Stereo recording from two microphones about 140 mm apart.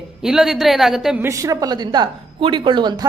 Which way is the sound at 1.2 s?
25° right (ahead or behind).